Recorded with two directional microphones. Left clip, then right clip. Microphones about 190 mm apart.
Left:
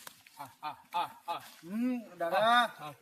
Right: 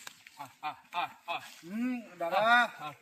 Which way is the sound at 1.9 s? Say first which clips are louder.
Right 1 dB; centre (ahead or behind).